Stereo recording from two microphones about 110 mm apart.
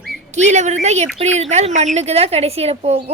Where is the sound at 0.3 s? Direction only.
90° right.